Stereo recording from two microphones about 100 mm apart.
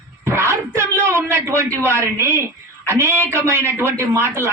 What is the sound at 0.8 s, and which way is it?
A man's voice, 25° right (ahead or behind).